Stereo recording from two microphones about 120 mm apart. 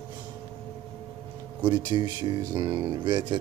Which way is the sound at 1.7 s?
40° right (ahead or behind).